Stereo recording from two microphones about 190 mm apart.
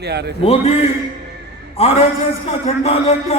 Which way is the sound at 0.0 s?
60° right (ahead or behind).